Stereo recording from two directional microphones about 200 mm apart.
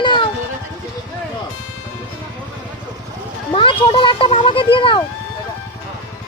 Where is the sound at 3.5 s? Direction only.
25° left (ahead or behind).